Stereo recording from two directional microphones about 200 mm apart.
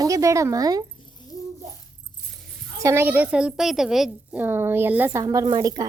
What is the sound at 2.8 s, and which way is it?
A woman's voice, 10° right (ahead or behind).